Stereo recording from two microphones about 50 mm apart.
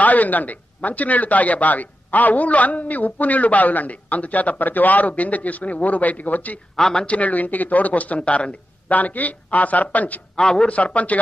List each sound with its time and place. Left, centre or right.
0.0 s speech: left
6.8 s a man's voice: centre
7.1 s speech: left
10.3 s a man's voice: centre
10.7 s speech: left